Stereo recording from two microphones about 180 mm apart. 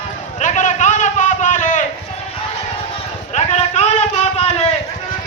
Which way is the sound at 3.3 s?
40° left (ahead or behind).